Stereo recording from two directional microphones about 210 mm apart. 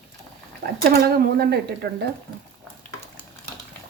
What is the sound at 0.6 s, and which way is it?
Speech, 50° right (ahead or behind).